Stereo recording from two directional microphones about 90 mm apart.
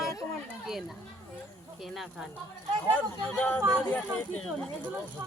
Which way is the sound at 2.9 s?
20° left (ahead or behind).